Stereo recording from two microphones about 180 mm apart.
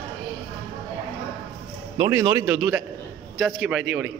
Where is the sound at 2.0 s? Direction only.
10° right (ahead or behind).